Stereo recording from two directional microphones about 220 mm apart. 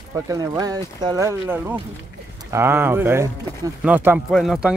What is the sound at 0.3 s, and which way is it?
Speech, 15° right (ahead or behind).